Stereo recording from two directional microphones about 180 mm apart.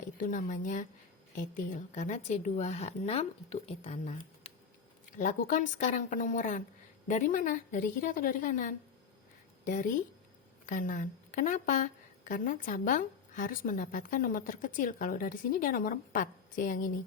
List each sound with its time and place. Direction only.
0.2 s a woman's voice: 45° left (ahead or behind)
4.4 s a sound: 35° left (ahead or behind)
5.1 s a woman's voice: 45° left (ahead or behind)
10.7 s a woman's voice: 45° left (ahead or behind)